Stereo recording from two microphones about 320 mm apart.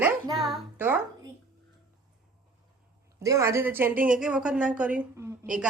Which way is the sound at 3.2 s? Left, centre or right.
Centre.